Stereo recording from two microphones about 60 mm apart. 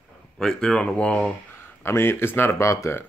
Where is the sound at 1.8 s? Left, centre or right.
Left.